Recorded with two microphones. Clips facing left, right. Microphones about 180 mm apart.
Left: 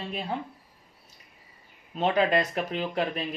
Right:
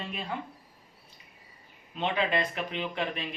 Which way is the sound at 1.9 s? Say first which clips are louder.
Left 5 dB; 40° left (ahead or behind).